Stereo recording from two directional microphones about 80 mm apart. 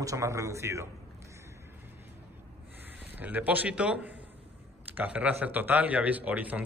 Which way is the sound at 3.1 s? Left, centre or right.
Right.